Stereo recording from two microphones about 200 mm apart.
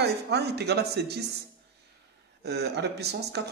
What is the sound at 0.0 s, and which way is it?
Speech, 55° right (ahead or behind).